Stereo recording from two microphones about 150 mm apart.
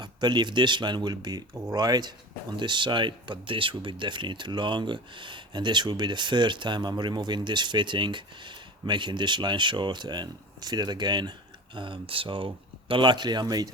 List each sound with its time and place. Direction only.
0.0 s speech: 30° right (ahead or behind)